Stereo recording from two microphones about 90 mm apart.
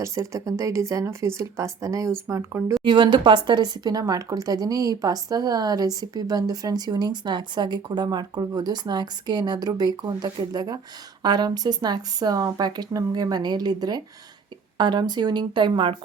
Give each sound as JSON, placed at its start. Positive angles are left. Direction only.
{"t": 0.0, "sound": "speech", "side_deg": -35}
{"t": 2.8, "sound": "speech", "side_deg": -60}